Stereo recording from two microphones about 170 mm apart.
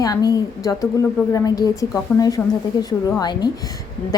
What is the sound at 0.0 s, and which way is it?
A woman's voice, 20° left (ahead or behind).